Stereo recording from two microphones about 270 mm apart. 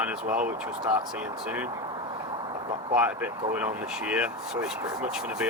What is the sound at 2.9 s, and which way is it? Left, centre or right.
Speech, centre.